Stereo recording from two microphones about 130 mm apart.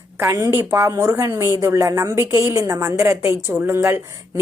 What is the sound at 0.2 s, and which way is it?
A woman's voice, 20° right (ahead or behind).